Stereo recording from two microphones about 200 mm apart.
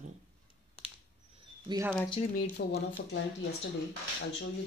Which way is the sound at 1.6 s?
15° right (ahead or behind).